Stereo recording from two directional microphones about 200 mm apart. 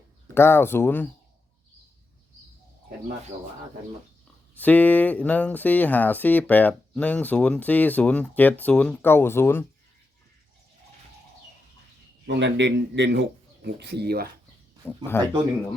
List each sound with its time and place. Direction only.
0.3 s speech: 10° left (ahead or behind)
4.5 s speech: 10° left (ahead or behind)
12.2 s speech: 60° right (ahead or behind)
14.8 s speech: 10° left (ahead or behind)